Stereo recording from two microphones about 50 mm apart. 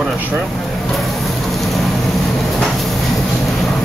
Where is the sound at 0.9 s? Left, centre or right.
Centre.